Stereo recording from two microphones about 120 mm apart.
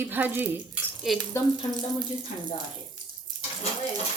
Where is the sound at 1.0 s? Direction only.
Centre (ahead or behind).